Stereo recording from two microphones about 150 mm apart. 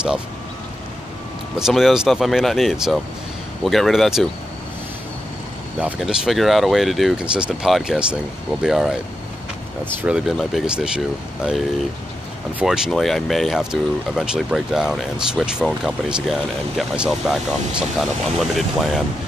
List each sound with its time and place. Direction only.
1.6 s speech: centre (ahead or behind)
5.8 s speech: 5° right (ahead or behind)
12.5 s speech: 5° right (ahead or behind)